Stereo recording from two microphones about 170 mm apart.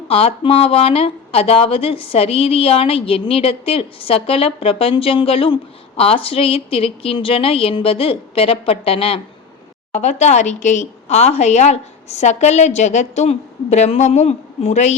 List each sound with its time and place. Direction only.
0.1 s speech: 35° left (ahead or behind)